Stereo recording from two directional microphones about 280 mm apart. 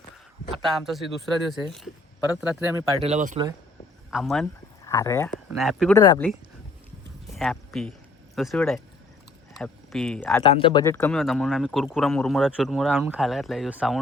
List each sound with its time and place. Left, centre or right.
0.8 s speech: centre
3.1 s speech: right
4.1 s speech: centre
6.0 s speech: centre
7.3 s speech: centre
10.4 s speech: centre